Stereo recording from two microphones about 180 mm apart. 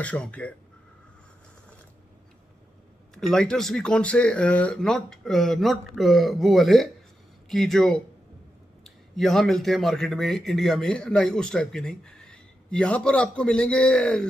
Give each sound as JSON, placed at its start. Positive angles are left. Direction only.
{"t": 0.0, "sound": "speech", "side_deg": 5}
{"t": 3.2, "sound": "speech", "side_deg": 5}